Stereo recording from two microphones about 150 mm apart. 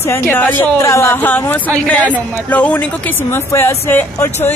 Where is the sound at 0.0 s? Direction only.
15° left (ahead or behind).